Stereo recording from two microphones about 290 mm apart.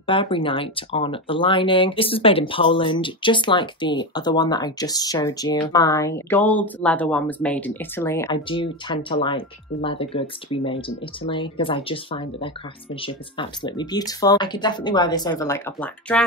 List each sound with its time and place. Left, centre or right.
0.0 s speech: centre